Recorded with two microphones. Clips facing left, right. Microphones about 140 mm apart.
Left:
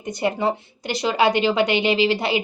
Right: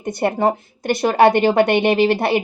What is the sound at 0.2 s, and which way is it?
A woman's voice, 55° right (ahead or behind).